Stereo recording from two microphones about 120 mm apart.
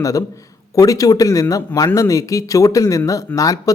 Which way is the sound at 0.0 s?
25° left (ahead or behind).